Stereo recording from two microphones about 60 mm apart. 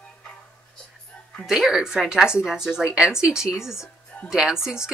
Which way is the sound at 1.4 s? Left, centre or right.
Centre.